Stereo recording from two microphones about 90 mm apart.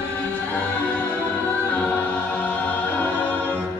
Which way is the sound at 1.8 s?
20° left (ahead or behind).